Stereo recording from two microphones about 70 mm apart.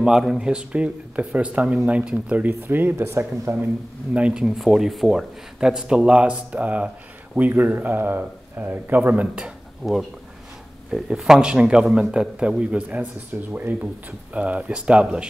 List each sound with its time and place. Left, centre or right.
0.0 s a man's voice: centre; by 3.5 s right
4.1 s a man's voice: centre
9.8 s speech: centre
10.9 s a man's voice: centre